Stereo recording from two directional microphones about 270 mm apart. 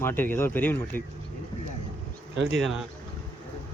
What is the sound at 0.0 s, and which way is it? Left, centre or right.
Speech, centre.